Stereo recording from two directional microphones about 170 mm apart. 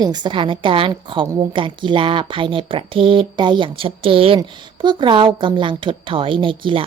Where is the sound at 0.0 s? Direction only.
25° right (ahead or behind).